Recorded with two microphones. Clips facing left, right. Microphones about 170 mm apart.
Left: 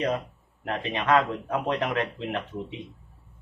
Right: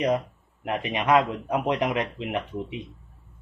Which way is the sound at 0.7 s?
15° right (ahead or behind).